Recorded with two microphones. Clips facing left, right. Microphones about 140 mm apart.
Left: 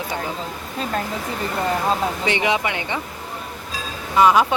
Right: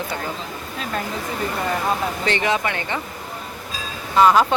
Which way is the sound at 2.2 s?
15° left (ahead or behind).